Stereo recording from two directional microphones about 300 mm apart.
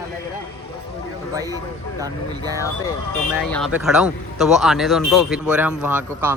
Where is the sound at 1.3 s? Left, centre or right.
Centre.